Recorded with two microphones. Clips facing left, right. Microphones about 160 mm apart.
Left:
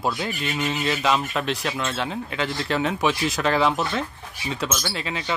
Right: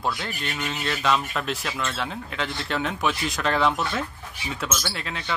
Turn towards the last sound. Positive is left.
turn(degrees=5)  # may be behind; listen again after turning